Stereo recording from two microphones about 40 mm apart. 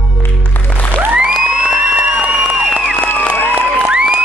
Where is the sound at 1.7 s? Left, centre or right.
Right.